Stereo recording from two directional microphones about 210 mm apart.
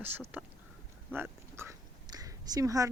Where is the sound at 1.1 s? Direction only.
10° right (ahead or behind).